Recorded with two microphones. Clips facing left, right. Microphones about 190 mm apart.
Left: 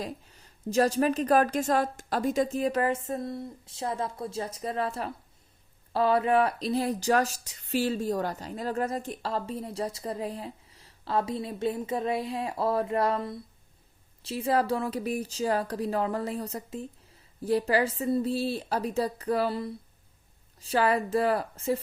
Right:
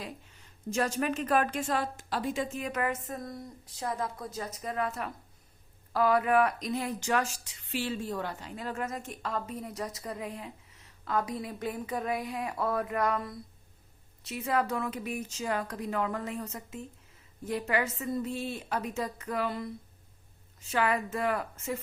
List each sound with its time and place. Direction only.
0.0 s a woman's voice: 40° left (ahead or behind)